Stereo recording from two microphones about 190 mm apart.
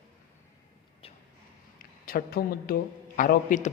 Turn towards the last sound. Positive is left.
turn(degrees=45)  # may be behind; listen again after turning